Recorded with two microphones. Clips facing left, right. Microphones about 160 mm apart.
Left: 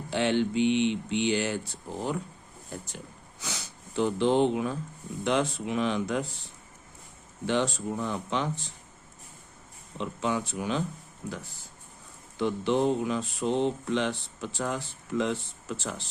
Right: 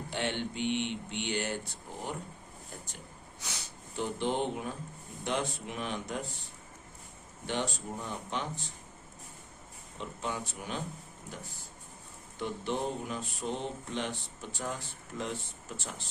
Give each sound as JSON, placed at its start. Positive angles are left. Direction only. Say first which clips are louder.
{"t": 0.1, "sound": "speech", "louder": "left 9 dB", "side_deg": 90}
{"t": 3.4, "sound": "speech", "louder": "left 6 dB", "side_deg": 90}
{"t": 7.4, "sound": "speech", "louder": "left 7 dB", "side_deg": 90}
{"t": 10.0, "sound": "speech", "louder": "left 7 dB", "side_deg": 90}
{"t": 12.4, "sound": "speech", "louder": "left 8 dB", "side_deg": 90}